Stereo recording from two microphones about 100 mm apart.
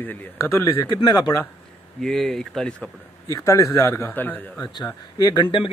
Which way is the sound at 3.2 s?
30° left (ahead or behind).